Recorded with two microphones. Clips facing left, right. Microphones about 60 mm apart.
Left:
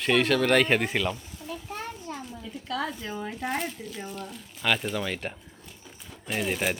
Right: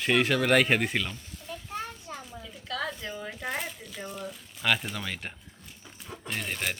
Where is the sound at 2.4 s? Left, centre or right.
Centre.